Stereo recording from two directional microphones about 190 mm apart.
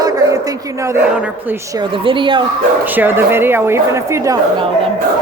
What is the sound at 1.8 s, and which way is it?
Speech, 25° right (ahead or behind).